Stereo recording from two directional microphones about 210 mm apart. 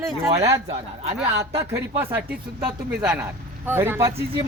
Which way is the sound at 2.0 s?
10° right (ahead or behind).